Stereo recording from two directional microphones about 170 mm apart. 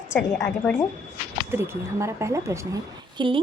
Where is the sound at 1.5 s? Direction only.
15° right (ahead or behind).